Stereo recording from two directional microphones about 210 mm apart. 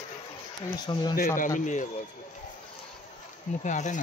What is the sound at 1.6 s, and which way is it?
Speech, 35° left (ahead or behind).